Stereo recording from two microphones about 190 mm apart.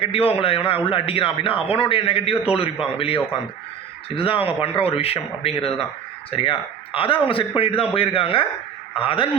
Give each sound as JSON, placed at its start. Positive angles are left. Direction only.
{"t": 0.0, "sound": "a man's voice", "side_deg": 30}
{"t": 4.1, "sound": "a man's voice", "side_deg": 30}